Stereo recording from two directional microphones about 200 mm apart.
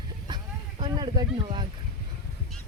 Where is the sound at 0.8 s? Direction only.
20° right (ahead or behind).